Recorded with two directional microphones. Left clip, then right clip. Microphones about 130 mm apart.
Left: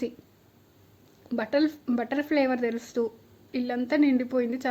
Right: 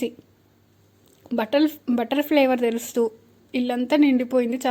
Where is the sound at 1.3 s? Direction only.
30° right (ahead or behind).